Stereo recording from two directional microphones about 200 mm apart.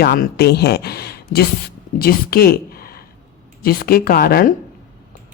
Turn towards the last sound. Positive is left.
turn(degrees=50)  # may be behind; listen again after turning